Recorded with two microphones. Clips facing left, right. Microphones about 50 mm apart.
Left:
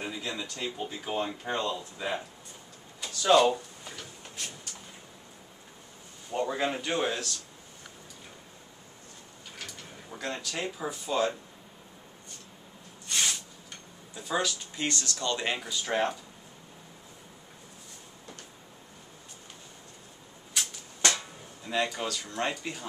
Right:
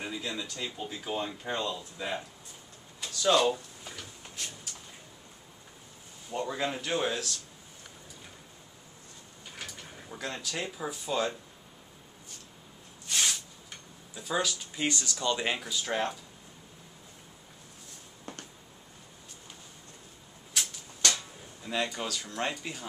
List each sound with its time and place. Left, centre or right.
0.0 s speech: centre
6.3 s speech: centre
10.0 s speech: centre
13.0 s a sound: centre
14.1 s speech: centre
14.8 s speech: centre
15.5 s speech: centre
20.5 s a sound: centre
21.0 s a sound: left
21.6 s speech: centre